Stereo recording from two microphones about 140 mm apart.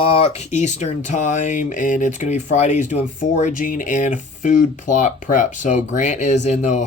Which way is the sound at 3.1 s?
70° left (ahead or behind).